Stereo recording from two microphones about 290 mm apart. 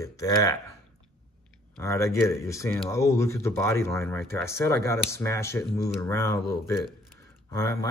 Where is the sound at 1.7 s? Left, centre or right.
Centre.